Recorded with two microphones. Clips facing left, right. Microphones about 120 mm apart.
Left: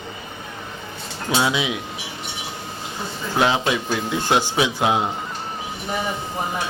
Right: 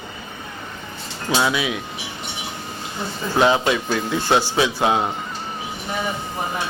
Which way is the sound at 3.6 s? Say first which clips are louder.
Right 2 dB; 15° left (ahead or behind).